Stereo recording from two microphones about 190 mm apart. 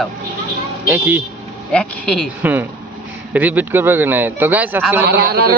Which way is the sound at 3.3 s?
10° right (ahead or behind).